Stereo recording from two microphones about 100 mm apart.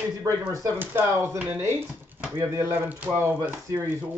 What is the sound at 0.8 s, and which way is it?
Speech, 25° right (ahead or behind).